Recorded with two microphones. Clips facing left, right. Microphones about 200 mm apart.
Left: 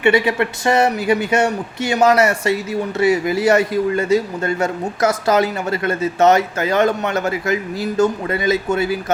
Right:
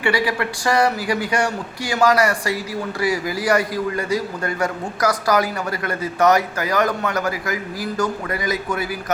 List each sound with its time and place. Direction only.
0.0 s a man's voice: 25° left (ahead or behind)